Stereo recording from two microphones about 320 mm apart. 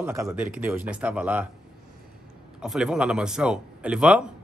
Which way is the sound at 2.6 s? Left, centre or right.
Centre.